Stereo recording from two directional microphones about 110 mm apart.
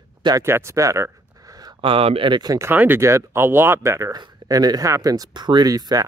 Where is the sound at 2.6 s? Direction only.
20° right (ahead or behind).